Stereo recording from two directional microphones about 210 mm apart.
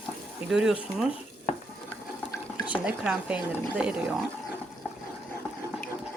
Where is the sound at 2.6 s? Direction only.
5° right (ahead or behind).